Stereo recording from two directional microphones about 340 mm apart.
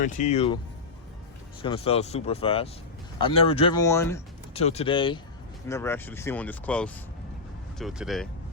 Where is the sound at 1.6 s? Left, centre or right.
Centre.